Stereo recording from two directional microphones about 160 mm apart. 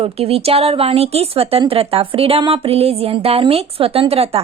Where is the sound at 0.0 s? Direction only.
40° right (ahead or behind).